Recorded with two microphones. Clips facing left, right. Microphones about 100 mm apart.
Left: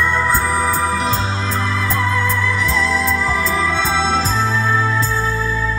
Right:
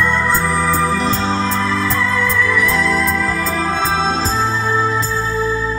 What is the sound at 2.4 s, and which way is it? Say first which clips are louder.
Music: right 2 dB; 55° right (ahead or behind).